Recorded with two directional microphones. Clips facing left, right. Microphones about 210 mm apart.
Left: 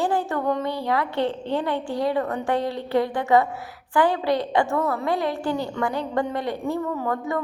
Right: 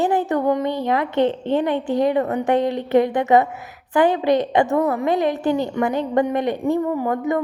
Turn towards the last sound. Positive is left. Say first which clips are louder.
# right 5 dB
turn(degrees=-20)  # may be behind; listen again after turning